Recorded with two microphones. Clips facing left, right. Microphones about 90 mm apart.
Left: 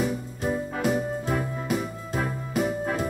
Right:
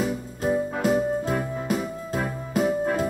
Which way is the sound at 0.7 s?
40° right (ahead or behind).